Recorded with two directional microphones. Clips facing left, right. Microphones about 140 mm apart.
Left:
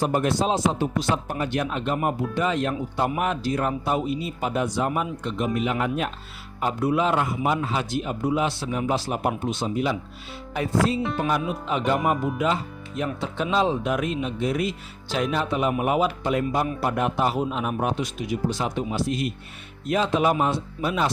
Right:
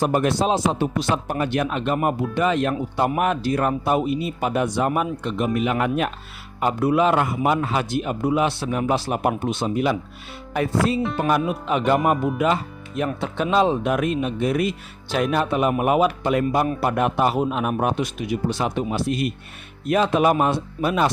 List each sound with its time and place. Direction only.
0.0 s speech: 70° right (ahead or behind)
13.0 s speech: 60° right (ahead or behind)